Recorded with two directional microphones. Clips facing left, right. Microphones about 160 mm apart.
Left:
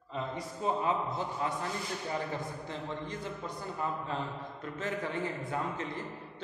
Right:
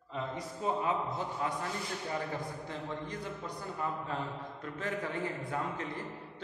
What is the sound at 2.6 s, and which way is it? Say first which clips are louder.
A man's voice: left 1 dB; 25° left (ahead or behind).